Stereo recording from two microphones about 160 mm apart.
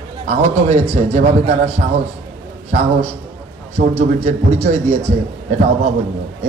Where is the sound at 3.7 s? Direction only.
45° right (ahead or behind).